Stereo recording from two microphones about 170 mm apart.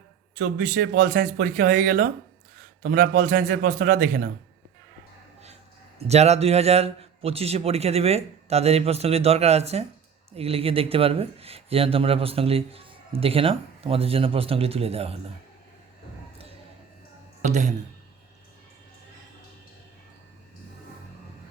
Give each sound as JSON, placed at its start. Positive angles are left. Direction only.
{"t": 0.3, "sound": "speech", "side_deg": -60}
{"t": 6.0, "sound": "speech", "side_deg": -40}
{"t": 17.4, "sound": "speech", "side_deg": -45}